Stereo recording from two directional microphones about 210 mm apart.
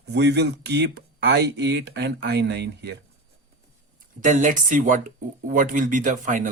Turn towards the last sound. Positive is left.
turn(degrees=-40)  # may be behind; listen again after turning